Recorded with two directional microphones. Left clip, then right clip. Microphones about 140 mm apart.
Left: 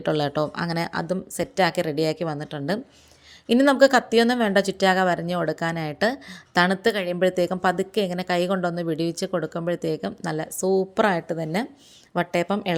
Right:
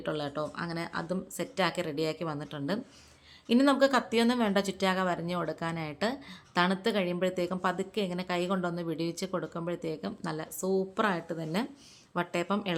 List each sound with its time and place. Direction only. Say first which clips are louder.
0.0 s speech: left 10 dB; 55° left (ahead or behind); by 12.7 s 35° left (ahead or behind)